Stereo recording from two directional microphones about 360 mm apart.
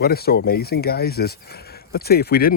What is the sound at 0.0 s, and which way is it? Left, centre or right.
Speech, left.